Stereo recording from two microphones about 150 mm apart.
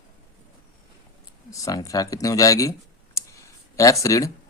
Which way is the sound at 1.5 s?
20° left (ahead or behind).